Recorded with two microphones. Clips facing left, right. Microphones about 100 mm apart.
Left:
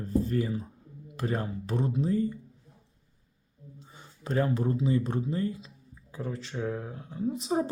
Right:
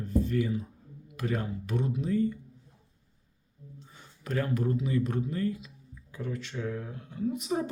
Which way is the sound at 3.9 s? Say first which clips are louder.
Left 3 dB; 25° left (ahead or behind).